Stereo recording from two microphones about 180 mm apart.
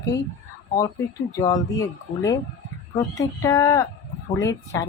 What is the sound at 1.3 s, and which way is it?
Speech, 20° left (ahead or behind).